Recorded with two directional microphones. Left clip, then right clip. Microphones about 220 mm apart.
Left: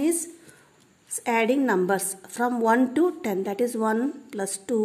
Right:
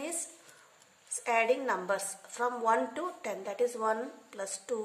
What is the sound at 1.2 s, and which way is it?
A woman's voice, 40° left (ahead or behind).